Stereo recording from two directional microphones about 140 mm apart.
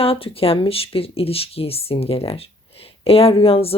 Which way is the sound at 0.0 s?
40° left (ahead or behind).